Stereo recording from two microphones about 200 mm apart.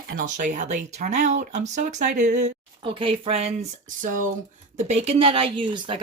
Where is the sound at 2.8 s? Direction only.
25° right (ahead or behind).